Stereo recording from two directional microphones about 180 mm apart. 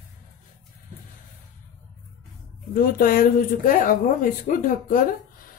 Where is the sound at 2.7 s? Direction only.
50° left (ahead or behind).